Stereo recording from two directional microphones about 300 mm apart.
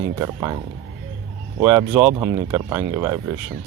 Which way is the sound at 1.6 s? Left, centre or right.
Centre.